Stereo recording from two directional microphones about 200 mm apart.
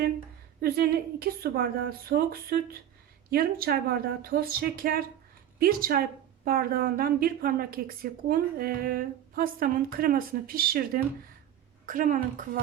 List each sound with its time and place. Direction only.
0.6 s a woman's voice: 50° right (ahead or behind)